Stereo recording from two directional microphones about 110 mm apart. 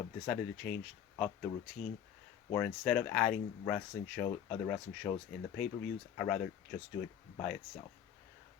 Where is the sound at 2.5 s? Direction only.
15° left (ahead or behind).